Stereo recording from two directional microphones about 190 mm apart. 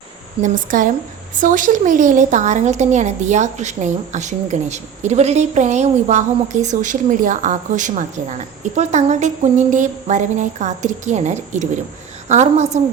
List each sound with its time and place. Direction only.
0.4 s a woman's voice: 45° right (ahead or behind)